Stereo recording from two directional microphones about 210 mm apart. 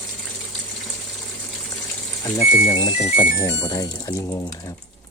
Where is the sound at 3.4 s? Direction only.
15° left (ahead or behind).